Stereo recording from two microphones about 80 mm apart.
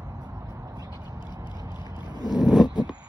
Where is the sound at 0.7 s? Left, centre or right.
Right.